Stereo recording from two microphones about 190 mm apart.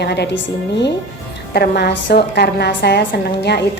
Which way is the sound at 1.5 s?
60° left (ahead or behind).